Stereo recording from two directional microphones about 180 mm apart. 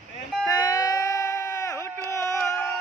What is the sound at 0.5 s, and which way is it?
Baby cry, 20° left (ahead or behind).